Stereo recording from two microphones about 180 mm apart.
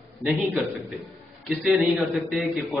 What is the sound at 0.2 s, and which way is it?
A man's voice, centre (ahead or behind).